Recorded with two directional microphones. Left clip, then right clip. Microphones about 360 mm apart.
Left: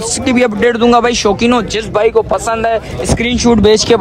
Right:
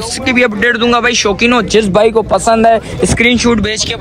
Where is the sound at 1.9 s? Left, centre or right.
Right.